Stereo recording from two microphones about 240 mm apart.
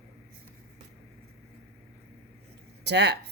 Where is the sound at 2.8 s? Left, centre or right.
Right.